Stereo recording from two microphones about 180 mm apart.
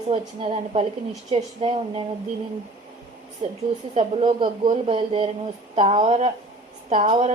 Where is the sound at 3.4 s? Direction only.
30° right (ahead or behind).